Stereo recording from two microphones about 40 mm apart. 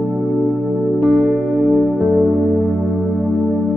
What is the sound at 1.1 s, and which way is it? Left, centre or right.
Music, centre.